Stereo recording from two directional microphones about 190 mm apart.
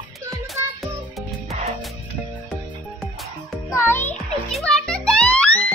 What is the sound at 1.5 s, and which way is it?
Music, 35° right (ahead or behind).